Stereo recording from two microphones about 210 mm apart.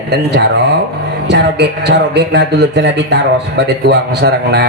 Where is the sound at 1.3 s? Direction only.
55° right (ahead or behind).